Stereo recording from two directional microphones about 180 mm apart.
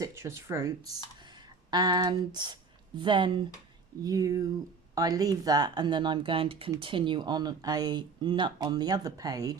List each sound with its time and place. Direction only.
0.0 s speech: 15° right (ahead or behind)